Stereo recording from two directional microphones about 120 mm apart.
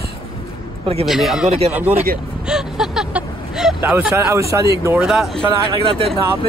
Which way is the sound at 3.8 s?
10° right (ahead or behind).